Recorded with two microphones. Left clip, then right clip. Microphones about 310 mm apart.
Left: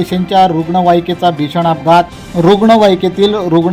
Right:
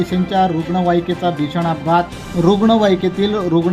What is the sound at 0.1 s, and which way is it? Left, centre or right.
Speech, centre.